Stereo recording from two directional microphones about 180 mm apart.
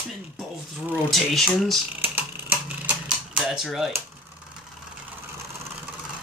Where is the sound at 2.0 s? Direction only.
10° right (ahead or behind).